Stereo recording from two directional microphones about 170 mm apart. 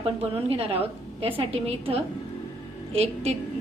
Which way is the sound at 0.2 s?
35° right (ahead or behind).